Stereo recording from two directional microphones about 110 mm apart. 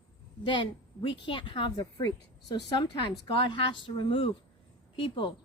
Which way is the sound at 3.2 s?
50° left (ahead or behind).